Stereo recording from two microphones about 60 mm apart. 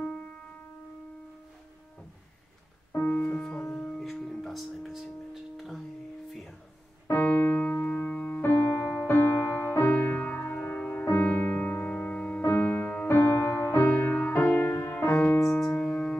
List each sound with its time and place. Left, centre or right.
3.0 s music: left; by 5.8 s centre
7.1 s keyboard: left
8.4 s music: left
11.2 s music: left
11.5 s music: left
12.4 s music: left
15.3 s keyboard: left
15.8 s music: centre